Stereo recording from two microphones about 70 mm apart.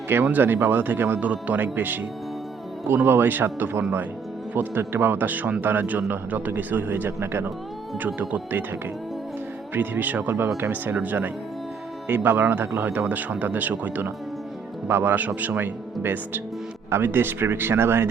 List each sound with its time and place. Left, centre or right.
0.3 s a man's voice: right
9.7 s a man's voice: right